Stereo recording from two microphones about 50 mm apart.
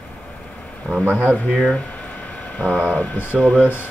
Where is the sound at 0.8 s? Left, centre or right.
Left.